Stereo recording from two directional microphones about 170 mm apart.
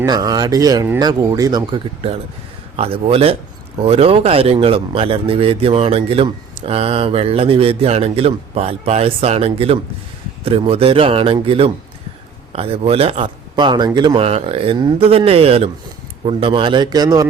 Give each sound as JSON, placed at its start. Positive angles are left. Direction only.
{"t": 0.0, "sound": "speech", "side_deg": -20}